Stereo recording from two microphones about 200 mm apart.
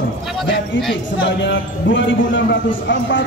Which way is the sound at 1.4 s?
65° left (ahead or behind).